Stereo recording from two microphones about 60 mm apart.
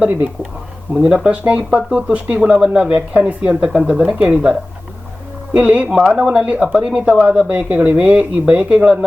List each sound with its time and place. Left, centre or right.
1.0 s speech: centre
5.5 s speech: right